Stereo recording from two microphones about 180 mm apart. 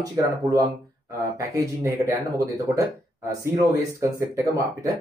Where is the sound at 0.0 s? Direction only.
20° right (ahead or behind).